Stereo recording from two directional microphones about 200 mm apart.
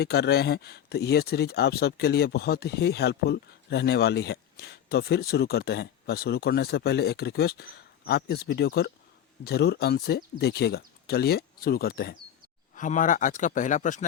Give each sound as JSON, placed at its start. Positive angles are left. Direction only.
{"t": 0.0, "sound": "speech", "side_deg": 55}
{"t": 12.7, "sound": "speech", "side_deg": 40}